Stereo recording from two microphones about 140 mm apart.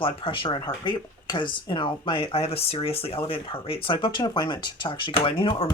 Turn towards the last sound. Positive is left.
turn(degrees=40)  # may be behind; listen again after turning